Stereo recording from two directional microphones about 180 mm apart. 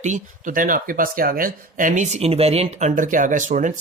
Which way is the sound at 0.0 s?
45° right (ahead or behind).